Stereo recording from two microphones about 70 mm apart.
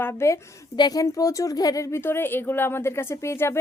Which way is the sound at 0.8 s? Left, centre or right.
Left.